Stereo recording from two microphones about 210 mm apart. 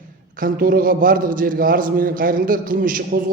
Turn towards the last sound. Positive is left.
turn(degrees=-40)  # may be behind; listen again after turning